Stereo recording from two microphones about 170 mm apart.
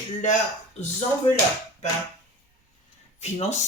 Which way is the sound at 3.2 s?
40° left (ahead or behind).